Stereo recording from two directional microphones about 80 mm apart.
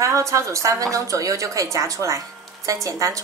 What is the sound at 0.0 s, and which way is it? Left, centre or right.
A woman's voice, right.